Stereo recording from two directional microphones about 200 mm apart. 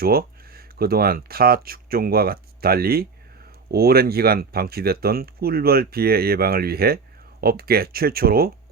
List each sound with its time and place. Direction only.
0.0 s speech: 50° right (ahead or behind)